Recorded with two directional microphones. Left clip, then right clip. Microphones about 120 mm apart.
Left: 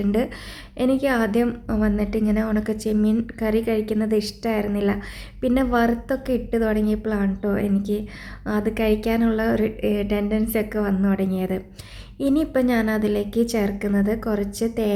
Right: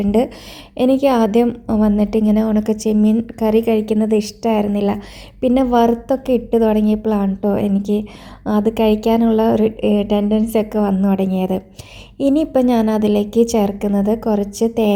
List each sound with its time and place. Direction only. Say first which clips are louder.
0.0 s a woman's voice: right 7 dB; 35° right (ahead or behind)